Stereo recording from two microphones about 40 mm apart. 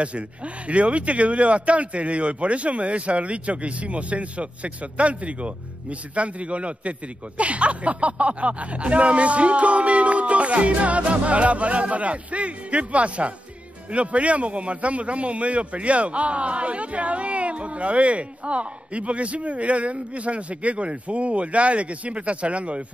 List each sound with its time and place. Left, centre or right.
0.7 s speech: right